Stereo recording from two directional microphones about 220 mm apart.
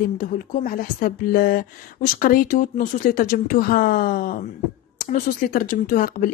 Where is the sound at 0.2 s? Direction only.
35° left (ahead or behind).